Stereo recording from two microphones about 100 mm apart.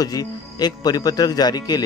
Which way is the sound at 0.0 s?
40° left (ahead or behind).